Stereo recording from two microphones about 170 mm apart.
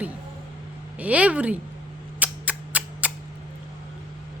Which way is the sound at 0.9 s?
10° right (ahead or behind).